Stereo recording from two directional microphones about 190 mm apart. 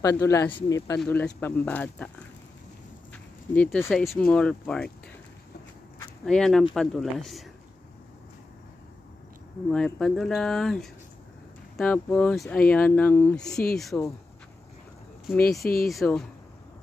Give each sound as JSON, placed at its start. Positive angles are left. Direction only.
{"t": 0.0, "sound": "speech", "side_deg": 15}
{"t": 0.5, "sound": "speech", "side_deg": 25}
{"t": 0.9, "sound": "speech", "side_deg": 5}
{"t": 6.2, "sound": "speech", "side_deg": 5}
{"t": 9.7, "sound": "speech", "side_deg": 5}
{"t": 15.6, "sound": "speech", "side_deg": 50}
{"t": 15.9, "sound": "speech", "side_deg": 0}